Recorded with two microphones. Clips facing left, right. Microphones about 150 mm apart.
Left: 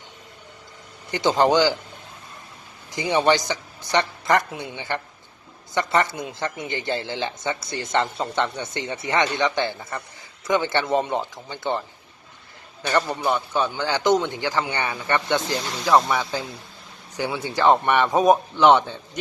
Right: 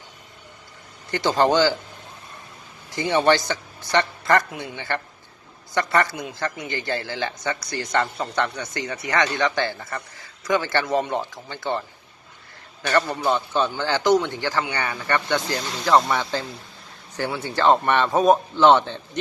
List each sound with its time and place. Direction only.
1.1 s speech: 20° left (ahead or behind)
2.9 s speech: 15° left (ahead or behind)
16.0 s speech: 5° left (ahead or behind)